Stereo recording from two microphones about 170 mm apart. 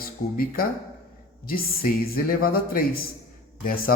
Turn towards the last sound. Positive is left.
turn(degrees=60)  # may be behind; listen again after turning